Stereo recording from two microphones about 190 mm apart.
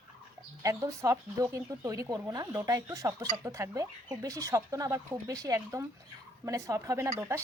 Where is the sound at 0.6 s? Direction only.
15° right (ahead or behind).